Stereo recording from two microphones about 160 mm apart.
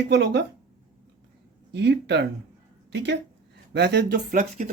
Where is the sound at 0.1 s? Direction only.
90° right.